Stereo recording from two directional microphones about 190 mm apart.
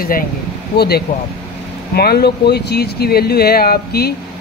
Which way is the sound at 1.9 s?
55° left (ahead or behind).